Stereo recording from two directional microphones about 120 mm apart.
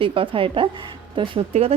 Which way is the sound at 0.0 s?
45° right (ahead or behind).